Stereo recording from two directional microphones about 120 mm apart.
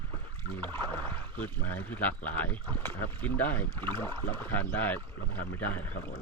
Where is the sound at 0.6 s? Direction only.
15° left (ahead or behind).